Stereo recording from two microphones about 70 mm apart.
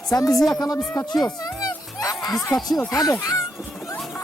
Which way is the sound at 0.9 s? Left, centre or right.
Left.